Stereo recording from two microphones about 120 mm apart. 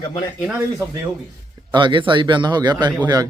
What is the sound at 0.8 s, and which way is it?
Speech, 25° right (ahead or behind).